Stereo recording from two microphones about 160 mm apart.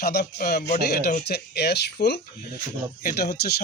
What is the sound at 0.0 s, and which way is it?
Speech, 80° left.